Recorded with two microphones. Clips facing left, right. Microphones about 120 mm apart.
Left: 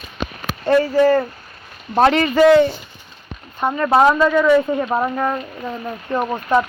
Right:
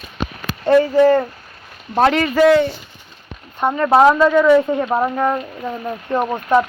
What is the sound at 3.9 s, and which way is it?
Speech, 15° right (ahead or behind).